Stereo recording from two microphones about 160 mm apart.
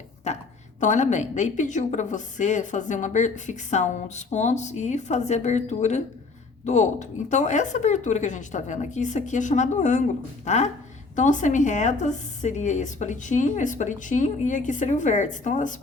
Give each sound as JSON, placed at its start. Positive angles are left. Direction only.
{"t": 0.8, "sound": "a woman's voice", "side_deg": 50}